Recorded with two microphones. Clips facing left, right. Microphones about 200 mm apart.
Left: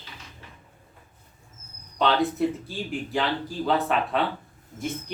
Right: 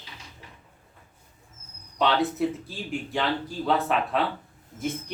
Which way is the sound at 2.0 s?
Centre (ahead or behind).